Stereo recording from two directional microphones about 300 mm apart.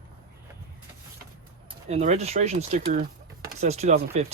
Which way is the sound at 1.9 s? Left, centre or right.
Right.